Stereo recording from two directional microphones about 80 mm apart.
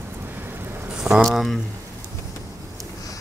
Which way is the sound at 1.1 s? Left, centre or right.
Centre.